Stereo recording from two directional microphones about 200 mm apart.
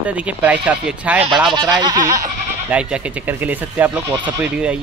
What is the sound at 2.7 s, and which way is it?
Speech, 5° right (ahead or behind).